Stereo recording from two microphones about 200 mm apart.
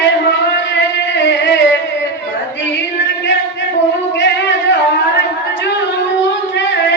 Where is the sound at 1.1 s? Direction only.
60° left (ahead or behind).